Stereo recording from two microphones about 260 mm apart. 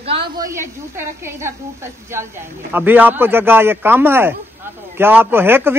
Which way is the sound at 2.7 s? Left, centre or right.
Centre.